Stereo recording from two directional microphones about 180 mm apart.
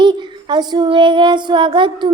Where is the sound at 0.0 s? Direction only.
25° right (ahead or behind).